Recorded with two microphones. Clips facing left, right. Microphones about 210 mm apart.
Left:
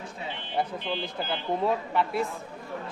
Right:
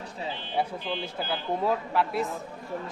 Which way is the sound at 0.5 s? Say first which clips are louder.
Left 1 dB; 5° right (ahead or behind).